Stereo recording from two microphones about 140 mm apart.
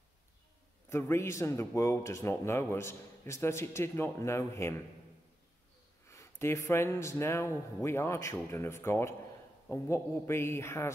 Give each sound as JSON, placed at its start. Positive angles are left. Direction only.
{"t": 0.8, "sound": "a man's voice", "side_deg": 20}
{"t": 6.0, "sound": "a man's voice", "side_deg": 20}